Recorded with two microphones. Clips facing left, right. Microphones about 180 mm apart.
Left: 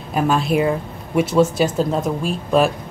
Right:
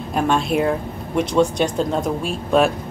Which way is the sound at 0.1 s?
Centre (ahead or behind).